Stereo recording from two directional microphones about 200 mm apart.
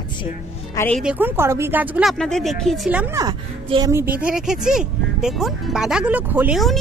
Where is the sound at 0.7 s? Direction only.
10° left (ahead or behind).